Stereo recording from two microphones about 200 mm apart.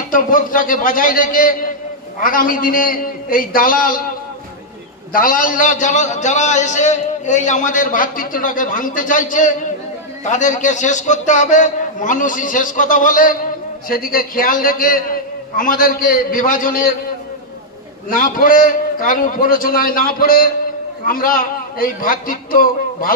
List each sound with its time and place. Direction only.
0.1 s a man's voice: 45° left (ahead or behind)
5.1 s a man's voice: 45° left (ahead or behind)
18.1 s a man's voice: 45° left (ahead or behind)